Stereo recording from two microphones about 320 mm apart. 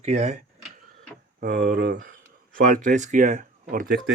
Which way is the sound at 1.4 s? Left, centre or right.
Right.